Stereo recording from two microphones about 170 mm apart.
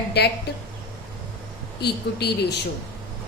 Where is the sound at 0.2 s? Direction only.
75° left (ahead or behind).